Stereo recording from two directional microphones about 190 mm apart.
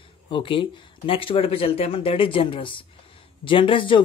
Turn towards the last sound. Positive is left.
turn(degrees=25)  # may be behind; listen again after turning